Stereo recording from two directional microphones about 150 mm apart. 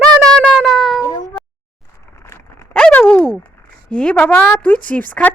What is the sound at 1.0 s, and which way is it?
Speech, 25° left (ahead or behind).